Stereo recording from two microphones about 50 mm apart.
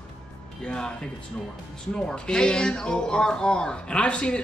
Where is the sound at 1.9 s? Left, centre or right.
Centre.